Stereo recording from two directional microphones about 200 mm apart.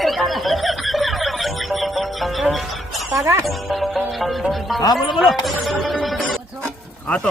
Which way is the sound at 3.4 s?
Centre (ahead or behind).